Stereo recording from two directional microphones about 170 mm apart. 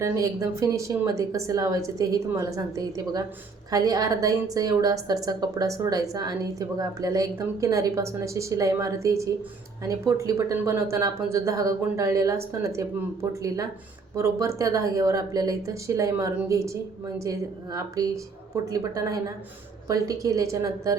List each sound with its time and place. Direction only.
0.0 s a woman's voice: 15° right (ahead or behind)